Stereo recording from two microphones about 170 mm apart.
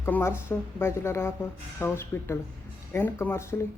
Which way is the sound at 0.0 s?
15° left (ahead or behind).